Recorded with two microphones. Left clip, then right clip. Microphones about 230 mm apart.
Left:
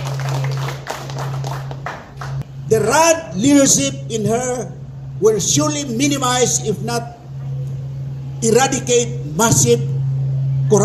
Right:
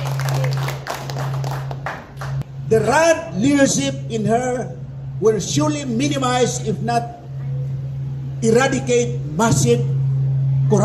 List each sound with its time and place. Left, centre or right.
2.7 s speech: left
8.4 s speech: left